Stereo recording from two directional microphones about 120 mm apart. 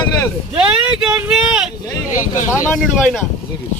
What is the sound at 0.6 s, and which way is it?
Speech, 10° right (ahead or behind).